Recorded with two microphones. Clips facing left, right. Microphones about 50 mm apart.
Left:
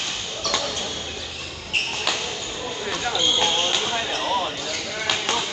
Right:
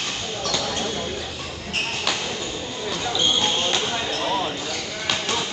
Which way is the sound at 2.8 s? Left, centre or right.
Centre.